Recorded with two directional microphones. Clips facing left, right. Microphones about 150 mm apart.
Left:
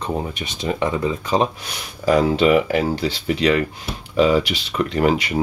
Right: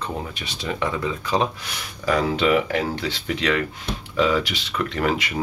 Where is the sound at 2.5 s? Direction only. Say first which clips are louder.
Left 4 dB; 5° left (ahead or behind).